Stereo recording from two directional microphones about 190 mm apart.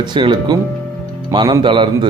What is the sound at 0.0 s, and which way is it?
A man's voice, 25° right (ahead or behind).